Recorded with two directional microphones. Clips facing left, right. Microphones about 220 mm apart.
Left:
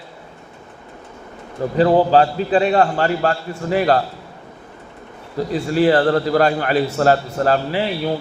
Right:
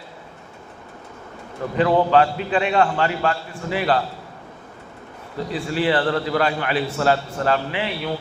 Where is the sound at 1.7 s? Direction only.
35° left (ahead or behind).